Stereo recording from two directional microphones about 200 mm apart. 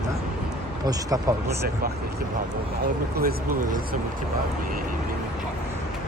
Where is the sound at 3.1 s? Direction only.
45° right (ahead or behind).